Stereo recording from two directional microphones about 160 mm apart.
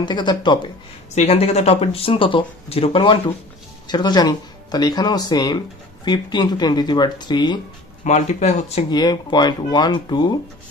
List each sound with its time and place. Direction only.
0.0 s speech: 30° left (ahead or behind)
1.1 s speech: 40° left (ahead or behind)
8.0 s speech: 45° left (ahead or behind)
8.9 s speech: 25° left (ahead or behind)